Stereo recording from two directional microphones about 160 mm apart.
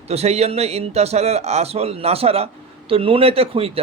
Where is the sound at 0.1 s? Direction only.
40° right (ahead or behind).